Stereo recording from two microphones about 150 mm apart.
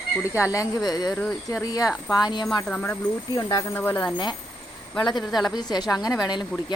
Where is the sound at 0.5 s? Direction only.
25° left (ahead or behind).